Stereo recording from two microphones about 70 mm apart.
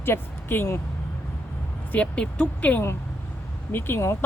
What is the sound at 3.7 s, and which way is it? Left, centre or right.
Speech, left.